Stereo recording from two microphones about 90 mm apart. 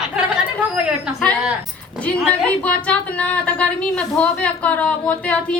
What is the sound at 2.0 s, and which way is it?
A woman's voice, 10° left (ahead or behind).